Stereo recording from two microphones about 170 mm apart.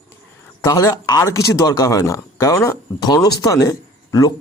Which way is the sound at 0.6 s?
20° left (ahead or behind).